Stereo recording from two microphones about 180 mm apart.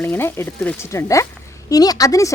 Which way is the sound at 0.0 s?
10° left (ahead or behind).